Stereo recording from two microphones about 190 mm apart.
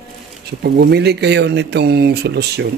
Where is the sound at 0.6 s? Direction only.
60° right (ahead or behind).